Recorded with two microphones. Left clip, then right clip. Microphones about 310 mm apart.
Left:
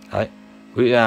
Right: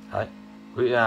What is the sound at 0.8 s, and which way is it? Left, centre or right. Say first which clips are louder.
Speech: left 6 dB; left.